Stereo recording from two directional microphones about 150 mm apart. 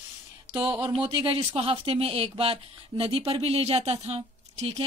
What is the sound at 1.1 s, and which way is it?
Speech, 40° right (ahead or behind).